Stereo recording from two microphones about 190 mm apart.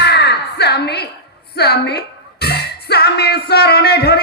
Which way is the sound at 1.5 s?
60° left (ahead or behind).